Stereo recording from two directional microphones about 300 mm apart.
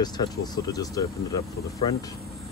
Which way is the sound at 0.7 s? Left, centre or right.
Centre.